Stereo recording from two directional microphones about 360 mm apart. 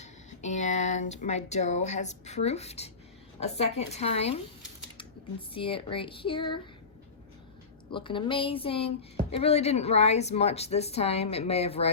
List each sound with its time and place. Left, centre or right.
0.0 s a woman's voice: centre
5.5 s a woman's voice: centre
7.9 s a woman's voice: centre